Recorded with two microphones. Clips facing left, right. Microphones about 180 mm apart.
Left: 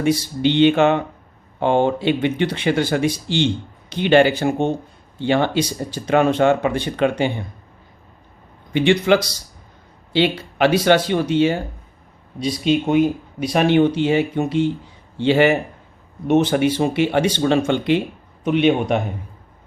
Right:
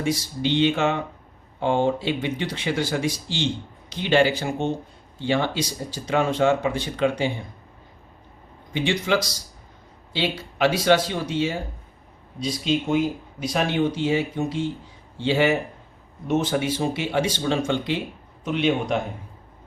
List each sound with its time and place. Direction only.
0.0 s speech: 65° left (ahead or behind)
8.7 s speech: 65° left (ahead or behind)